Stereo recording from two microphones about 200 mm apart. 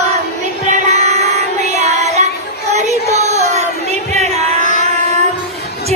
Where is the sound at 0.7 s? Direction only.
35° right (ahead or behind).